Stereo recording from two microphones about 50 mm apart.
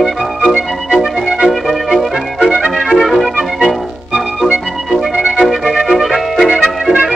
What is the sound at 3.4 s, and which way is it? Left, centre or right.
Music, centre.